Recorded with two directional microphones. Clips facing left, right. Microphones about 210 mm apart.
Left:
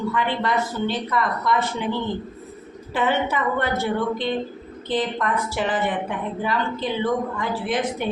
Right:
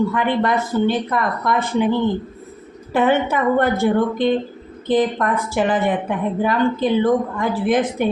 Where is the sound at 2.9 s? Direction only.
50° right (ahead or behind).